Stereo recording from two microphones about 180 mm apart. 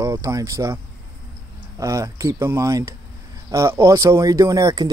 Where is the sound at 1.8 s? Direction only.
15° right (ahead or behind).